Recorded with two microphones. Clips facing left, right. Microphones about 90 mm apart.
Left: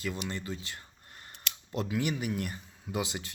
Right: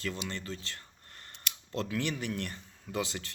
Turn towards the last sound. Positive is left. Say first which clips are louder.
# left 1 dB
turn(degrees=15)  # may be behind; listen again after turning